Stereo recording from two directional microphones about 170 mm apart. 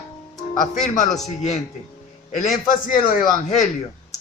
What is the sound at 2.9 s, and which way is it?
Speech, 55° left (ahead or behind).